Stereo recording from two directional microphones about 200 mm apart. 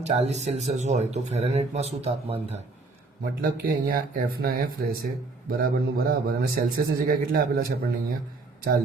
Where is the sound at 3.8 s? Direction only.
45° right (ahead or behind).